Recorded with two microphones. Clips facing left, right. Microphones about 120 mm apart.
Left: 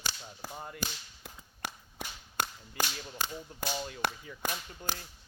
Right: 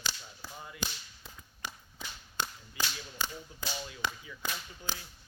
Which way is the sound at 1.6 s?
60° left (ahead or behind).